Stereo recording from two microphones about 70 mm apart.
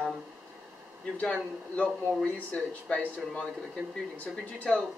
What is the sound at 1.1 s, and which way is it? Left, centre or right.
A man's voice, centre.